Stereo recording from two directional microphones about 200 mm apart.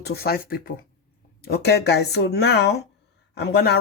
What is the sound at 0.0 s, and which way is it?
Speech, 50° left (ahead or behind).